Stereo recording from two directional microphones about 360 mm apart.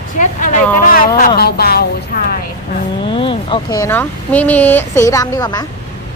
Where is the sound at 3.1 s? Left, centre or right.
Centre.